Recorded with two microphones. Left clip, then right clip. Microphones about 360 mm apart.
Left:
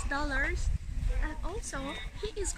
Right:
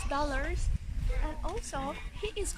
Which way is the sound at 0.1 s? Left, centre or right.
Centre.